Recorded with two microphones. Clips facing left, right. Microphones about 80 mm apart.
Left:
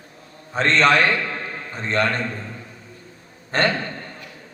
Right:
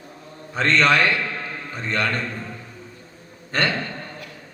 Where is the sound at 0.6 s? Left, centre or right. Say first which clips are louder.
Left 1 dB; left.